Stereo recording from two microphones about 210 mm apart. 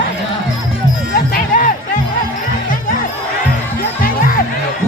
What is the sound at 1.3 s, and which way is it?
Music, 40° left (ahead or behind).